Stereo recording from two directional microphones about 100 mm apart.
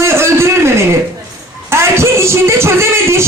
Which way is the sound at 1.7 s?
25° right (ahead or behind).